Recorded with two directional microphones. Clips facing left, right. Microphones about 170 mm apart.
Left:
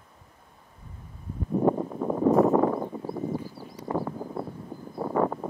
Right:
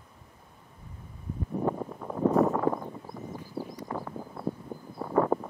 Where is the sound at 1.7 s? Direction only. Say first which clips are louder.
Left 7 dB; 35° left (ahead or behind).